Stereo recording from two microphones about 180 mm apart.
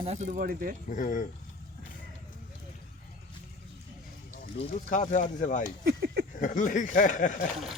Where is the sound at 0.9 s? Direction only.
45° left (ahead or behind).